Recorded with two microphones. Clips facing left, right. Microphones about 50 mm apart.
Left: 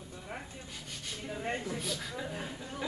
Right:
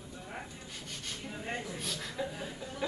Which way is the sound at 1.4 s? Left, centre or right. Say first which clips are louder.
Left 3 dB; left.